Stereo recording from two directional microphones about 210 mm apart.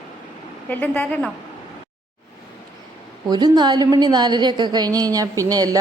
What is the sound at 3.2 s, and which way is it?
A woman's voice, 20° right (ahead or behind).